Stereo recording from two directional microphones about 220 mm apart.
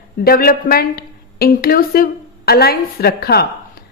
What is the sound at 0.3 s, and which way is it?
A woman's voice, 40° left (ahead or behind).